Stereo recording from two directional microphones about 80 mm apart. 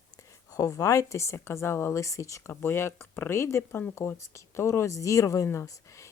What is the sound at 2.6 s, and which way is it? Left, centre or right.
Speech, left.